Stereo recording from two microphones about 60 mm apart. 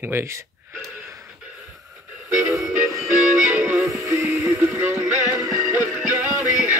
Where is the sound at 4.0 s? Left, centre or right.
Right.